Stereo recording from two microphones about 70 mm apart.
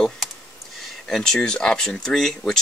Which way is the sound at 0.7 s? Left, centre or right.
Centre.